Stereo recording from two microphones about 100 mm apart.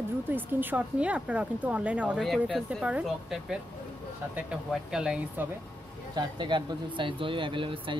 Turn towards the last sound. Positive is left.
turn(degrees=-60)  # may be behind; listen again after turning